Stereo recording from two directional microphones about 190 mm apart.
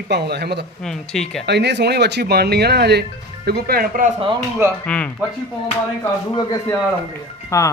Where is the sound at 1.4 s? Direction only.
60° right (ahead or behind).